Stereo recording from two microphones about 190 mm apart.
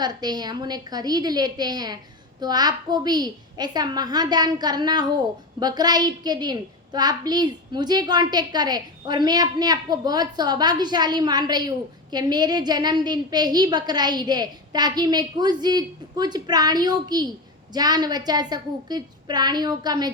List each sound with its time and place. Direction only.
0.0 s a woman's voice: 20° right (ahead or behind)